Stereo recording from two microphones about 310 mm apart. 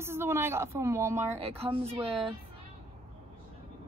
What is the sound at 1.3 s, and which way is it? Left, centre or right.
Speech, centre.